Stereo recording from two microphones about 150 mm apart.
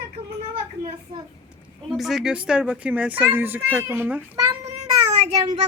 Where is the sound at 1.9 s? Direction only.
Centre (ahead or behind).